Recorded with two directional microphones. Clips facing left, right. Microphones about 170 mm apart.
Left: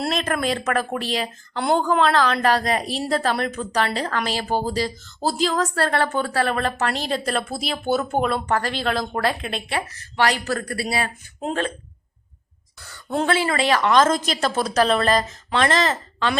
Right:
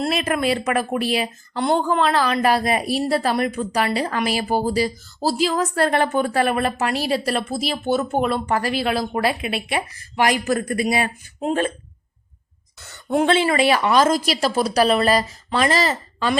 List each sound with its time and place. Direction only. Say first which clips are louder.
0.1 s speech: right 2 dB; 10° right (ahead or behind)
1.5 s speech: even; centre (ahead or behind); by 11.1 s 15° right (ahead or behind)
12.8 s a sound: right 5 dB; 25° right (ahead or behind)
13.2 s speech: right 3 dB; 20° right (ahead or behind)